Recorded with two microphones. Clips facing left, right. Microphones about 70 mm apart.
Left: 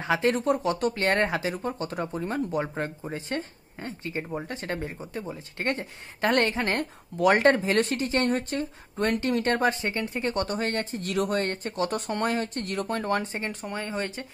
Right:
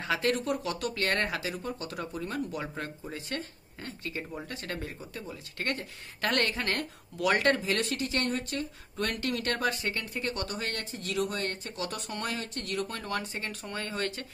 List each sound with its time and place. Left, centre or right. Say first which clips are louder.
0.0 s speech: left 5 dB; left